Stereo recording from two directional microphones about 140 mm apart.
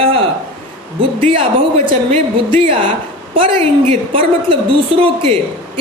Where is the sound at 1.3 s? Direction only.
40° right (ahead or behind).